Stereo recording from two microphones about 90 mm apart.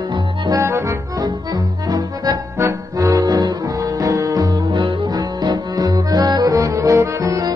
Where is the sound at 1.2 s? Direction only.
45° right (ahead or behind).